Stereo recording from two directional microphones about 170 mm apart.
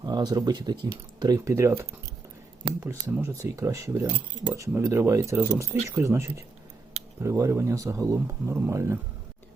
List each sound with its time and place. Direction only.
0.0 s speech: 25° right (ahead or behind)